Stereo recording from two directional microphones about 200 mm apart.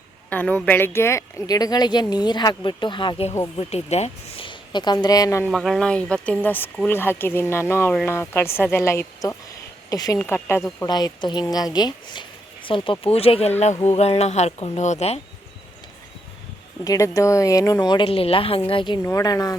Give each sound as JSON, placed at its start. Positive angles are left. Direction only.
{"t": 0.3, "sound": "speech", "side_deg": 5}
{"t": 5.5, "sound": "speech", "side_deg": 0}
{"t": 16.8, "sound": "speech", "side_deg": 15}